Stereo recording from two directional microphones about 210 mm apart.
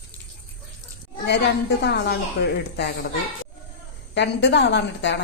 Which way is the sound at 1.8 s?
55° left (ahead or behind).